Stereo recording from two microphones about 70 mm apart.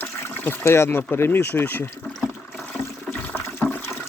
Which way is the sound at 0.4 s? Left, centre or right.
Left.